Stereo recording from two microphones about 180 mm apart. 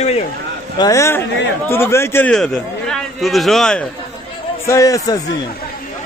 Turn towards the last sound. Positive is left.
turn(degrees=20)  # may be behind; listen again after turning